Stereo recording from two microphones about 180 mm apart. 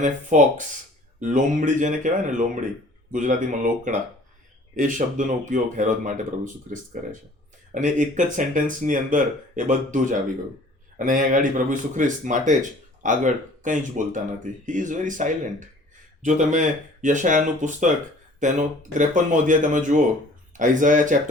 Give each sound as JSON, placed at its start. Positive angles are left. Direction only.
{"t": 0.0, "sound": "speech", "side_deg": -45}